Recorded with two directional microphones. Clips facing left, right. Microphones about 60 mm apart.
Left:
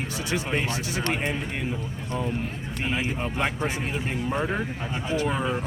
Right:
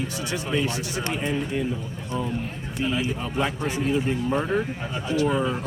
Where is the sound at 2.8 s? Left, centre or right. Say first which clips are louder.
Right 2 dB; left.